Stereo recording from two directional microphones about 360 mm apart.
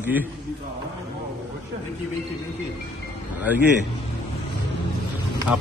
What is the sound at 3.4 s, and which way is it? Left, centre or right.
Speech, centre.